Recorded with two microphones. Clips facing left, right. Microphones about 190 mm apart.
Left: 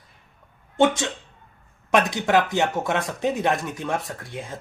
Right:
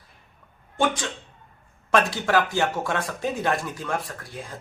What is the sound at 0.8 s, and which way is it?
Speech, 25° left (ahead or behind).